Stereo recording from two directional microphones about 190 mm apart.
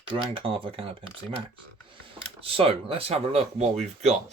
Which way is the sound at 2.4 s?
30° right (ahead or behind).